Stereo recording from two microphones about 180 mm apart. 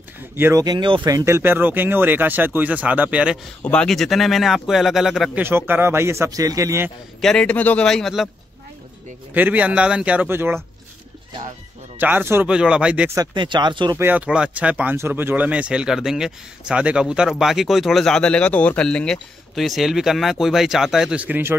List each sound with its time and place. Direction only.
0.4 s speech: 15° right (ahead or behind)
3.6 s speech: 5° left (ahead or behind)
5.4 s speech: 10° right (ahead or behind)
7.2 s speech: 5° left (ahead or behind)
9.3 s speech: 10° right (ahead or behind)
12.0 s speech: 10° right (ahead or behind)
13.1 s speech: 25° right (ahead or behind)
13.9 s speech: 10° right (ahead or behind)